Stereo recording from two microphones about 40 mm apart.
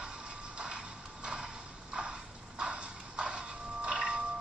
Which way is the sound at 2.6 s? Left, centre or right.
Right.